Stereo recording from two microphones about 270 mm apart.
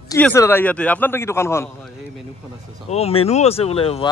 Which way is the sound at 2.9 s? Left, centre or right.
Left.